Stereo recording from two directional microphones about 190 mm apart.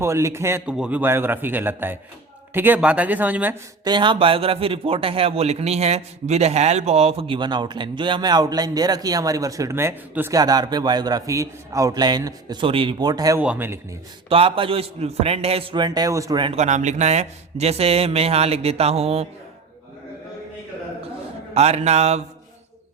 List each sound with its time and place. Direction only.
0.0 s a man's voice: 15° right (ahead or behind)
3.8 s a man's voice: 25° right (ahead or behind)
14.3 s a man's voice: 30° right (ahead or behind)
21.5 s a man's voice: 35° right (ahead or behind)